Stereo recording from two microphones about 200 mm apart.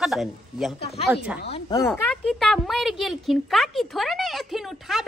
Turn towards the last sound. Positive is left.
turn(degrees=0)  # may be behind; listen again after turning